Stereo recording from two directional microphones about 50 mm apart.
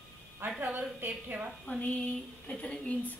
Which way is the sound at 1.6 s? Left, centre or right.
Left.